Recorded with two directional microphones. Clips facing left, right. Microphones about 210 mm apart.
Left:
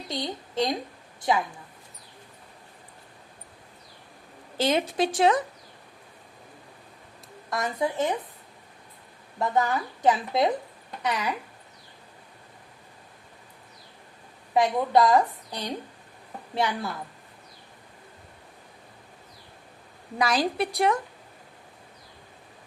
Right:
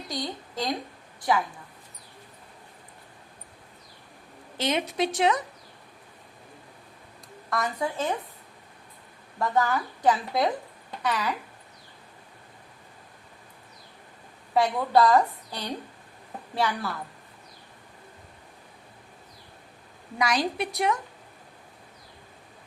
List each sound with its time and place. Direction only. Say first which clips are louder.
0.1 s a woman's voice: left 2 dB; 25° left (ahead or behind)
4.5 s a woman's voice: left 3 dB; 30° left (ahead or behind)
7.6 s a woman's voice: left 3 dB; 20° left (ahead or behind)
9.4 s a woman's voice: even; 20° left (ahead or behind)
14.5 s a woman's voice: left 1 dB; 15° left (ahead or behind)
20.1 s a woman's voice: left 2 dB; 30° left (ahead or behind)